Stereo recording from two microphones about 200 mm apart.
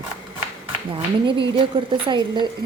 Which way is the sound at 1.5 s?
25° right (ahead or behind).